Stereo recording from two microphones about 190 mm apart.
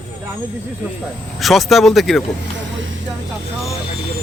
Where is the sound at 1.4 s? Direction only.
Centre (ahead or behind).